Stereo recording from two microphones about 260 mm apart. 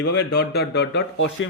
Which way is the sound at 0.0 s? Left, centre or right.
Left.